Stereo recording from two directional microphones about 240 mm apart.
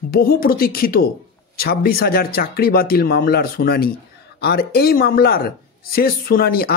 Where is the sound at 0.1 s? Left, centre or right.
Left.